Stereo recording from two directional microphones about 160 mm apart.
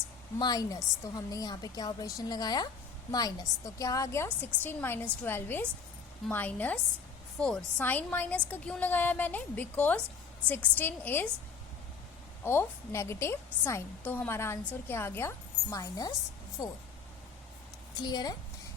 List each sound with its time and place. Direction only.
0.3 s a woman's voice: 25° left (ahead or behind)
12.5 s a woman's voice: 15° left (ahead or behind)
17.9 s speech: 25° left (ahead or behind)